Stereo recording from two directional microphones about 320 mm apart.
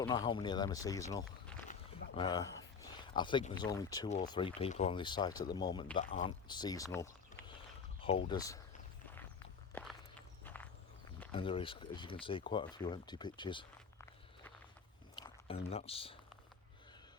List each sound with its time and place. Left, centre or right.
0.0 s speech: centre
9.7 s walk: centre
11.3 s speech: centre
15.1 s a sound: centre